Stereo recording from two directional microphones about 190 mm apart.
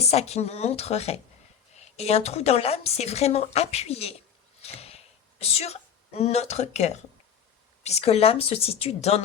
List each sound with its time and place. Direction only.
0.0 s speech: 35° left (ahead or behind)
4.6 s a sound: 35° left (ahead or behind)
7.9 s speech: 35° left (ahead or behind)